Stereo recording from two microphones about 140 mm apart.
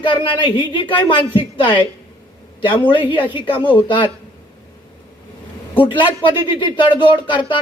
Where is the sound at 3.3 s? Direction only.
35° left (ahead or behind).